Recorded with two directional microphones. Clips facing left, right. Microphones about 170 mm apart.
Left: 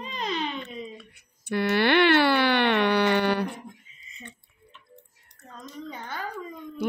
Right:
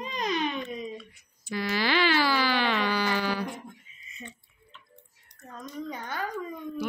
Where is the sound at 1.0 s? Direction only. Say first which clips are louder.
Right 3 dB; 60° left (ahead or behind).